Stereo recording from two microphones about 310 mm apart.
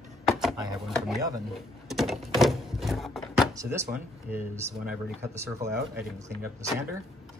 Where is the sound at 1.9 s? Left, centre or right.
Centre.